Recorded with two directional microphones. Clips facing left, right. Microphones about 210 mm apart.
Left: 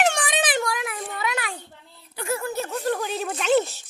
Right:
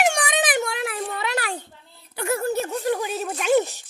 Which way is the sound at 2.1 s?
65° right (ahead or behind).